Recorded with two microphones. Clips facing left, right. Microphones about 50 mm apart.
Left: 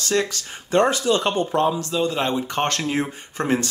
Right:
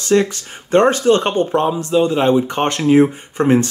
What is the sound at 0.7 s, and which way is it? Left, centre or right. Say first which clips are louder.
Speech: right 6 dB; right.